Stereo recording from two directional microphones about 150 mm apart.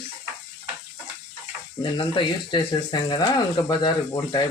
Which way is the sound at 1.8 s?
35° left (ahead or behind).